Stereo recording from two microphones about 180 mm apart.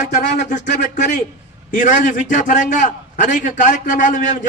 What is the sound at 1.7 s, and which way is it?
A man's voice, 45° left (ahead or behind).